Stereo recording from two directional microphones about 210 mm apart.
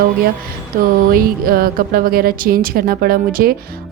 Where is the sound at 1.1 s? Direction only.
45° right (ahead or behind).